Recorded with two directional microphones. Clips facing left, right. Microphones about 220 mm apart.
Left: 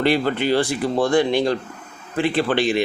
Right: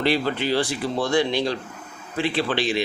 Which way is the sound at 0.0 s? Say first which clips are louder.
Left 3 dB; 55° left (ahead or behind).